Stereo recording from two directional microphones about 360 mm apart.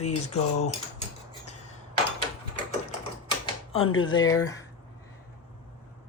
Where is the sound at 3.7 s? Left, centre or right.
Centre.